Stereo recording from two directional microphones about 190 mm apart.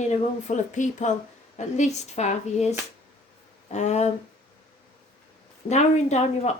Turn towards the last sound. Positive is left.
turn(degrees=35)  # may be behind; listen again after turning